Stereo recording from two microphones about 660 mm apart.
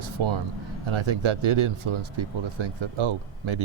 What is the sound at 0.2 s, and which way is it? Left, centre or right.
Speech, right.